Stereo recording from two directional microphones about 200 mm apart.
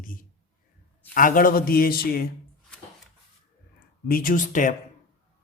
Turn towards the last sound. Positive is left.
turn(degrees=40)  # may be behind; listen again after turning